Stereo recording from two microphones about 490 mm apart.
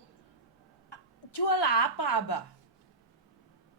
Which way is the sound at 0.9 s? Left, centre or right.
Left.